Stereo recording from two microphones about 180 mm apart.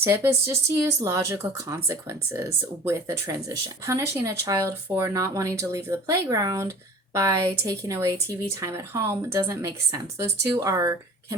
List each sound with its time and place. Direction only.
0.0 s speech: 15° right (ahead or behind)